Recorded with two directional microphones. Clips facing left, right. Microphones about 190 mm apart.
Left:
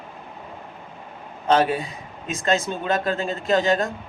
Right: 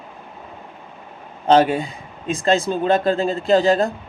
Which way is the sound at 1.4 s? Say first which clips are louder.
Right 4 dB; 30° right (ahead or behind).